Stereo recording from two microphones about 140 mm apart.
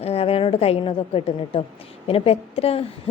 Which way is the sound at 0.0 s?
45° left (ahead or behind).